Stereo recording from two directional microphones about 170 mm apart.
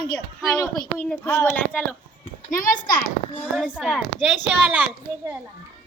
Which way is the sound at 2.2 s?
55° left (ahead or behind).